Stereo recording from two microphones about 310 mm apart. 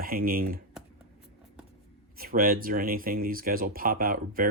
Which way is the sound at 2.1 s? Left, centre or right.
Right.